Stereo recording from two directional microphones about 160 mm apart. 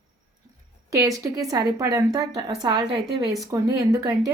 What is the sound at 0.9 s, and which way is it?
A woman's voice, 20° right (ahead or behind).